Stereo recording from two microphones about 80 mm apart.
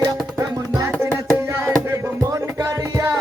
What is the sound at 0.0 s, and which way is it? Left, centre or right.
Music, right.